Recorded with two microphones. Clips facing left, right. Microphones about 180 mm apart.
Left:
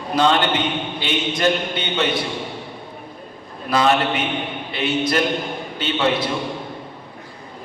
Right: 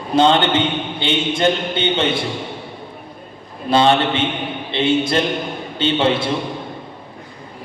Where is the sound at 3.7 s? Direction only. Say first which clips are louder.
Right 3 dB; 30° right (ahead or behind).